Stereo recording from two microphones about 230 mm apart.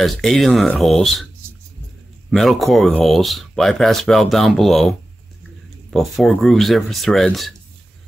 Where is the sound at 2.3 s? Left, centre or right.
Centre.